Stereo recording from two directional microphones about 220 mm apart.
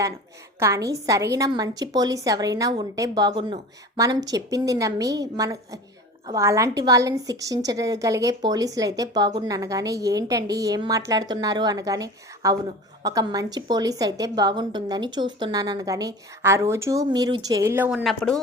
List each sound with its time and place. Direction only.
0.6 s a woman's voice: 15° right (ahead or behind); by 18.3 s centre (ahead or behind)